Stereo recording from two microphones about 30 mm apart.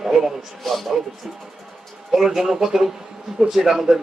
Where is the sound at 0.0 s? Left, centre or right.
Centre.